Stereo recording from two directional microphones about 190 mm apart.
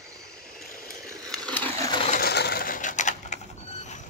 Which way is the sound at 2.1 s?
55° left (ahead or behind).